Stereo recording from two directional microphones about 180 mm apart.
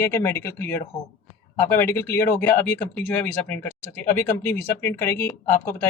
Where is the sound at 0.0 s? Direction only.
15° left (ahead or behind).